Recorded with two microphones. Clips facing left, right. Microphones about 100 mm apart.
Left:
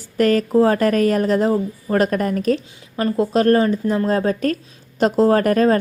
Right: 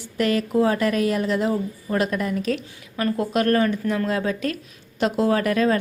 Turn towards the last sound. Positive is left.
turn(degrees=40)  # may be behind; listen again after turning